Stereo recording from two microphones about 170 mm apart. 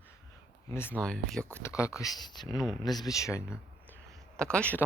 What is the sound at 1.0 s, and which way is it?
Speech, centre (ahead or behind).